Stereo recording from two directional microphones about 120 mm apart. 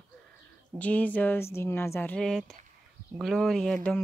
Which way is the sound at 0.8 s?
10° left (ahead or behind).